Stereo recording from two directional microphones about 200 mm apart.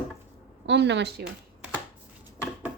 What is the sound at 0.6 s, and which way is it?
Speech, 60° right (ahead or behind).